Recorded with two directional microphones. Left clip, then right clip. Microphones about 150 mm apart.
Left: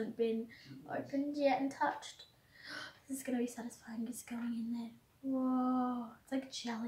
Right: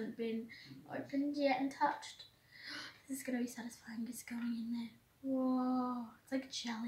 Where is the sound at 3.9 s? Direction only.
15° left (ahead or behind).